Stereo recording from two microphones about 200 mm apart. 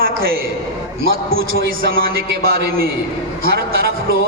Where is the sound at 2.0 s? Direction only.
45° right (ahead or behind).